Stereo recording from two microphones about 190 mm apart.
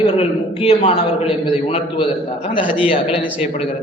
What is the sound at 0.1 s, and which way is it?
A man's voice, 30° left (ahead or behind).